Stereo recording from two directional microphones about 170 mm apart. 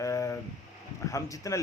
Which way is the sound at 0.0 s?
20° left (ahead or behind).